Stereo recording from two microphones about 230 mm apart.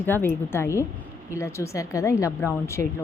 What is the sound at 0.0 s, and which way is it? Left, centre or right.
Speech, centre.